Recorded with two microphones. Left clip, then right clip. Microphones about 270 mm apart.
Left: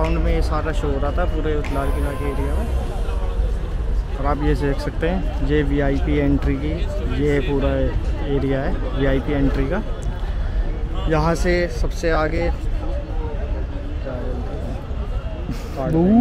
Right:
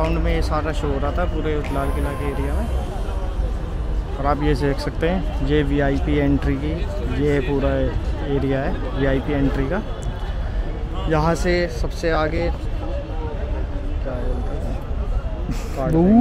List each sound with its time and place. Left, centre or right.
0.0 s speech: centre
4.4 s speech: centre
11.1 s speech: centre
15.9 s speech: right